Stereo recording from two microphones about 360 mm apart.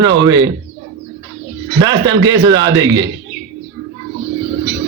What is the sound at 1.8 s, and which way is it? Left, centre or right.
Speech, centre.